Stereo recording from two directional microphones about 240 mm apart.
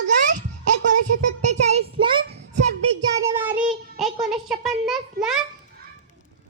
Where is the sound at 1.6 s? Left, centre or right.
Right.